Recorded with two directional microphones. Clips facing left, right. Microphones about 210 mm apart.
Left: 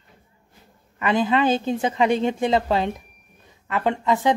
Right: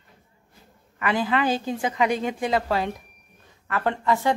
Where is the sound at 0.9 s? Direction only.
25° left (ahead or behind).